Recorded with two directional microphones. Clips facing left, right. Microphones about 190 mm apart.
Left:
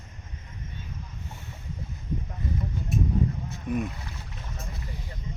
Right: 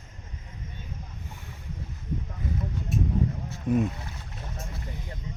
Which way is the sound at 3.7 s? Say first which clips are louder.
Right 5 dB; 25° right (ahead or behind).